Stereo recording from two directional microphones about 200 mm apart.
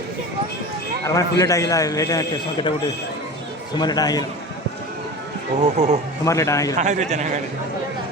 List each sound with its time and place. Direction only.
1.0 s a man's voice: 15° left (ahead or behind)
5.7 s a man's voice: 35° right (ahead or behind)
6.2 s a man's voice: 15° left (ahead or behind)
6.7 s a man's voice: 35° right (ahead or behind)